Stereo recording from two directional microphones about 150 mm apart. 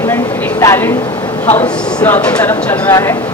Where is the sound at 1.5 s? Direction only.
15° left (ahead or behind).